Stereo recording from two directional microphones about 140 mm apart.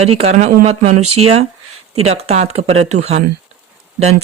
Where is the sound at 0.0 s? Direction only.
50° right (ahead or behind).